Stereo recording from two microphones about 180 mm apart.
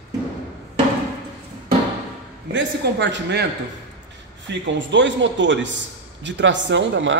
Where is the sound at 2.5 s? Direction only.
75° right (ahead or behind).